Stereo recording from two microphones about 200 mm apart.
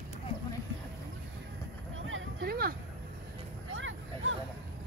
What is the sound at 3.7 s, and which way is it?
Vehicle, 75° right (ahead or behind).